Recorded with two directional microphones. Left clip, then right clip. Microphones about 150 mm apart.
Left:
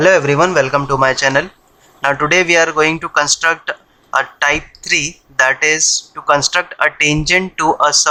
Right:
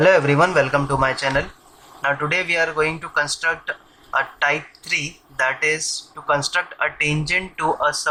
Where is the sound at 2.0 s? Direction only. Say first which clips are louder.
Left 8 dB; 55° left (ahead or behind).